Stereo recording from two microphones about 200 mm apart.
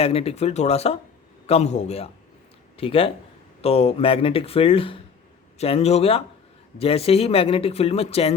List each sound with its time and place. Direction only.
0.0 s speech: 30° left (ahead or behind)